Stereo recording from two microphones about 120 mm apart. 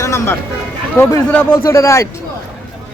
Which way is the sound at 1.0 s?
20° left (ahead or behind).